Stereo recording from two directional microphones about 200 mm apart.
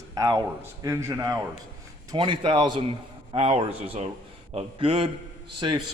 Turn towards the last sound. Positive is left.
turn(degrees=-25)  # may be behind; listen again after turning